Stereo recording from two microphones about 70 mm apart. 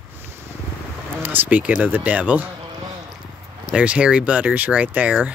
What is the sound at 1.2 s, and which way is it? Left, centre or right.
Speech, right.